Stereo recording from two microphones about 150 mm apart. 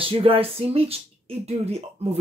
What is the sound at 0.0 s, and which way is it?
Speech, 40° right (ahead or behind).